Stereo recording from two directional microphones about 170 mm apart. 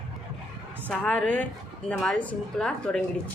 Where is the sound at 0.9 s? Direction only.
10° left (ahead or behind).